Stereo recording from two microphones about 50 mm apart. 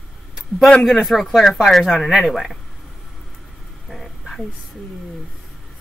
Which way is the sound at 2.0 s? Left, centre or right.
Centre.